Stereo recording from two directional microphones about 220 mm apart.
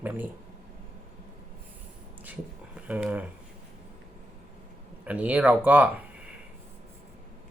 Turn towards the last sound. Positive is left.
turn(degrees=-5)  # may be behind; listen again after turning